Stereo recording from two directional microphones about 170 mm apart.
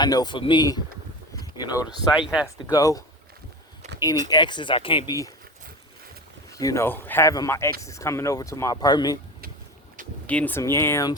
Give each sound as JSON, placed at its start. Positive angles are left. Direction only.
{"t": 0.0, "sound": "speech", "side_deg": 25}
{"t": 2.1, "sound": "speech", "side_deg": -5}
{"t": 2.6, "sound": "speech", "side_deg": 20}
{"t": 4.3, "sound": "speech", "side_deg": 25}
{"t": 6.5, "sound": "speech", "side_deg": 20}
{"t": 10.2, "sound": "speech", "side_deg": 10}